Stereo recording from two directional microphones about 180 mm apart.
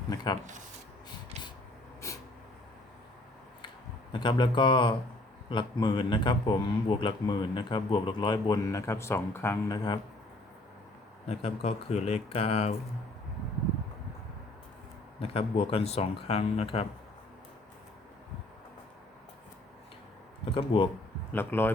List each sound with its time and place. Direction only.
2.0 s a sound: 15° left (ahead or behind)
4.1 s speech: 25° left (ahead or behind)
11.3 s speech: 35° left (ahead or behind)
15.2 s speech: 35° left (ahead or behind)
20.4 s speech: 30° left (ahead or behind)
21.3 s speech: 10° left (ahead or behind)